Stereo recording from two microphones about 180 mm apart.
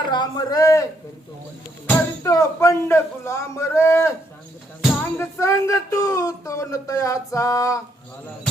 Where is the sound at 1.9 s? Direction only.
20° left (ahead or behind).